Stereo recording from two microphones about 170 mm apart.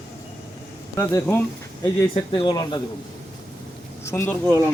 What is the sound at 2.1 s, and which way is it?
Speech, 30° left (ahead or behind).